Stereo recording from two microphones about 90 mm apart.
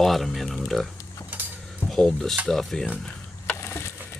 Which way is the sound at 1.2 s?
25° left (ahead or behind).